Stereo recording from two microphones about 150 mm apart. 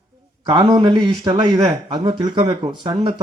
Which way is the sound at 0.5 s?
30° right (ahead or behind).